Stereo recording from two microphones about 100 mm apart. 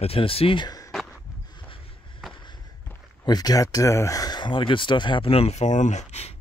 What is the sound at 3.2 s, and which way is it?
Speech, 40° left (ahead or behind).